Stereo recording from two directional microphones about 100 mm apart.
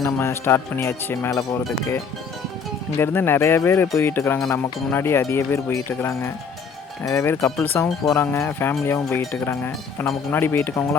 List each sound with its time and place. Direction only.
0.0 s speech: 25° left (ahead or behind)
3.0 s speech: 20° left (ahead or behind)